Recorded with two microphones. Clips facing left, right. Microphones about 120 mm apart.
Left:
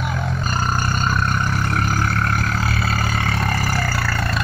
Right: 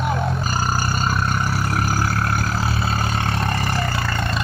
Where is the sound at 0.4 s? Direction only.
5° right (ahead or behind).